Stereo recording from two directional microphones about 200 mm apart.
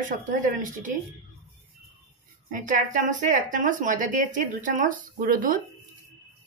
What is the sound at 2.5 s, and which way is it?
Speech, 40° right (ahead or behind).